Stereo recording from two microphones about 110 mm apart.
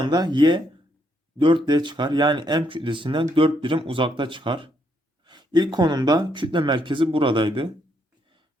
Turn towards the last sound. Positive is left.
turn(degrees=-50)  # may be behind; listen again after turning